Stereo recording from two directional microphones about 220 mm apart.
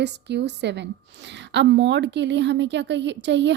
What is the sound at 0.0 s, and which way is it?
A woman's voice, 50° right (ahead or behind).